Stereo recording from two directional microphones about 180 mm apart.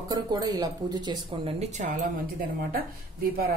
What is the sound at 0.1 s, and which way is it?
Speech, 20° right (ahead or behind).